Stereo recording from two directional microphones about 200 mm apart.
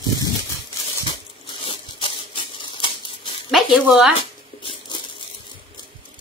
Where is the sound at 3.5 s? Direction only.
5° right (ahead or behind).